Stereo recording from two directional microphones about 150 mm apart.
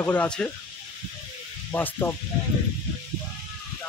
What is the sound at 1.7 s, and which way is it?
Speech, 15° left (ahead or behind).